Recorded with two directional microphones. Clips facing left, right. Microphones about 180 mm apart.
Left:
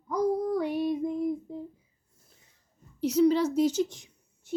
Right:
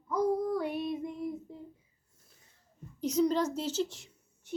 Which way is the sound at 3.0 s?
10° left (ahead or behind).